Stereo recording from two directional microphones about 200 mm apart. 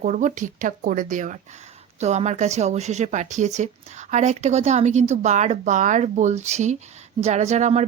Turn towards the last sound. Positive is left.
turn(degrees=-35)  # may be behind; listen again after turning